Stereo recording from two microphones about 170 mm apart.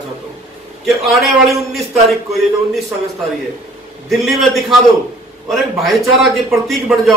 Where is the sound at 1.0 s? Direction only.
Centre (ahead or behind).